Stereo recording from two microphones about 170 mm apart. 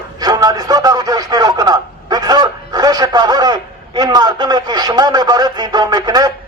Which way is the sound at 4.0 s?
25° right (ahead or behind).